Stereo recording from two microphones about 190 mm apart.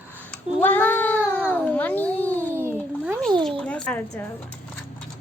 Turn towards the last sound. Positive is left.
turn(degrees=5)  # may be behind; listen again after turning